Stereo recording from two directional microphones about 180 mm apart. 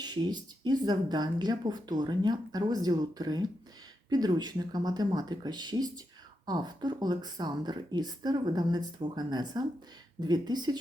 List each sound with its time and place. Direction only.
0.0 s speech: 25° right (ahead or behind)